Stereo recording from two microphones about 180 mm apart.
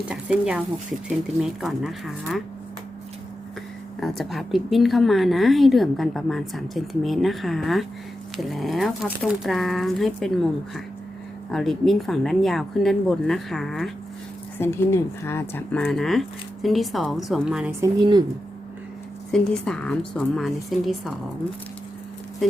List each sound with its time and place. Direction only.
0.1 s a woman's voice: 5° right (ahead or behind)
4.0 s a woman's voice: centre (ahead or behind)
14.6 s a woman's voice: 15° left (ahead or behind); by 17.7 s 5° right (ahead or behind)
17.7 s speech: 20° right (ahead or behind)
19.3 s a woman's voice: 5° left (ahead or behind)